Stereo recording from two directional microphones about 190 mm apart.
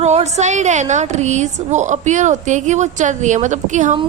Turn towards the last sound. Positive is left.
turn(degrees=-40)  # may be behind; listen again after turning